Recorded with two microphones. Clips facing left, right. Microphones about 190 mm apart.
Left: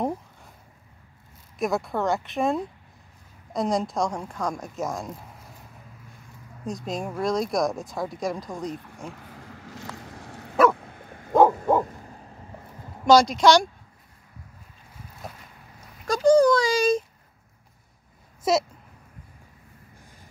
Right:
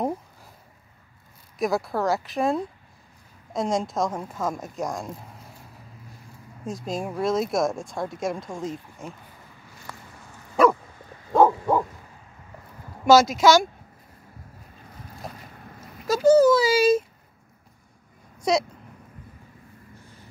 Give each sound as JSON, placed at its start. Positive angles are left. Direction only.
{"t": 1.6, "sound": "speech", "side_deg": 0}
{"t": 6.6, "sound": "speech", "side_deg": 0}
{"t": 9.1, "sound": "a sound", "side_deg": 80}
{"t": 10.5, "sound": "dog", "side_deg": 0}
{"t": 10.8, "sound": "bow-wow", "side_deg": 60}
{"t": 13.0, "sound": "speech", "side_deg": -5}
{"t": 16.1, "sound": "a sound", "side_deg": -5}
{"t": 18.4, "sound": "speech", "side_deg": 5}